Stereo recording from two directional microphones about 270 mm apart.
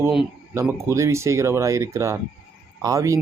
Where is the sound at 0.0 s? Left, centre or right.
Centre.